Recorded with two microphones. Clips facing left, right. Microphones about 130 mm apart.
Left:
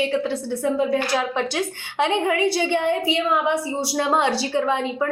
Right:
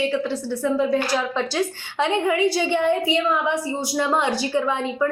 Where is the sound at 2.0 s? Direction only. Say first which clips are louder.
Even; 20° left (ahead or behind).